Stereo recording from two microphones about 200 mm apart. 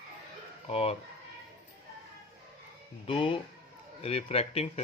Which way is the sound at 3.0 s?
25° left (ahead or behind).